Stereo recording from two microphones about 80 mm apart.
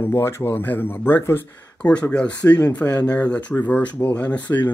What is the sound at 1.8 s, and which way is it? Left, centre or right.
Speech, centre.